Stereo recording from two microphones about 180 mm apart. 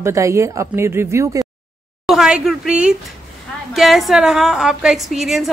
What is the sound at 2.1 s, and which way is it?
A woman's voice, 5° right (ahead or behind).